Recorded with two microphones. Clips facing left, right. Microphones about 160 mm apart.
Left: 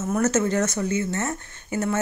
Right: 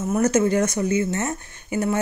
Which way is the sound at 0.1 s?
10° right (ahead or behind).